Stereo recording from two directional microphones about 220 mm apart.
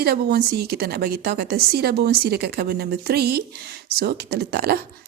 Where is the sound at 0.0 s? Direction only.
45° right (ahead or behind).